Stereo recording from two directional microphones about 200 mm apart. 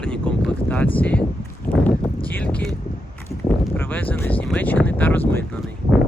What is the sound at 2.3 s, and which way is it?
Speech, 5° left (ahead or behind).